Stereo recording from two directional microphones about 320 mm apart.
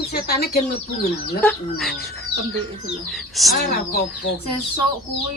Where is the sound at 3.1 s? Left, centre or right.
Centre.